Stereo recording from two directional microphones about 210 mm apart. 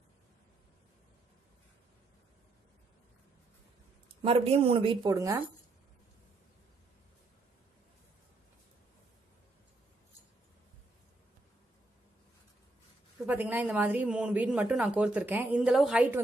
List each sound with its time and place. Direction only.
4.1 s speech: 25° right (ahead or behind)
13.2 s speech: 10° right (ahead or behind)